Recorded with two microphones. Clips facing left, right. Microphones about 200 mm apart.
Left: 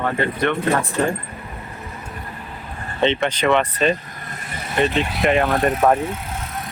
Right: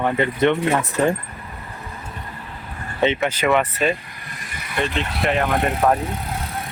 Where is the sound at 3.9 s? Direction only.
45° left (ahead or behind).